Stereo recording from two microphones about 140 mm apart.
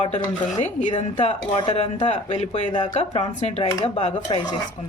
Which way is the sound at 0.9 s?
40° left (ahead or behind).